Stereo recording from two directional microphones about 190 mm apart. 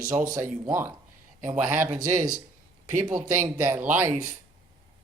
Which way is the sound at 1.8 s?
45° right (ahead or behind).